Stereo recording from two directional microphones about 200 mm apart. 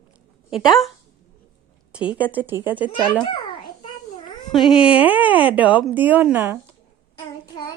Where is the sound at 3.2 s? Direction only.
20° left (ahead or behind).